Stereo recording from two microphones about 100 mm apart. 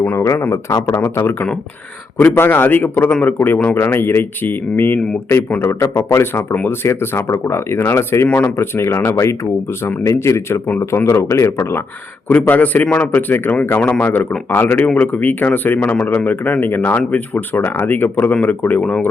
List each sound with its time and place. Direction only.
0.0 s a man's voice: 20° left (ahead or behind)
12.3 s a man's voice: 15° left (ahead or behind)